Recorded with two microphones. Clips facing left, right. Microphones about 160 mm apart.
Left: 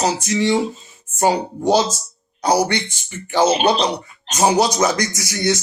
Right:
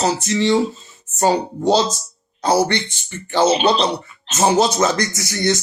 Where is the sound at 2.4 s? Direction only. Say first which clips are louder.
Right 1 dB; 15° left (ahead or behind).